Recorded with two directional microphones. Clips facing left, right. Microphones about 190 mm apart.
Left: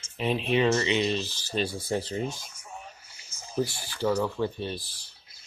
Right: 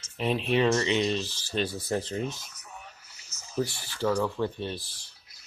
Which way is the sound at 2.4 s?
30° left (ahead or behind).